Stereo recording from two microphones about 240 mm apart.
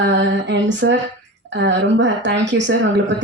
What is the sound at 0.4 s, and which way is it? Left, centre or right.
A woman's voice, right.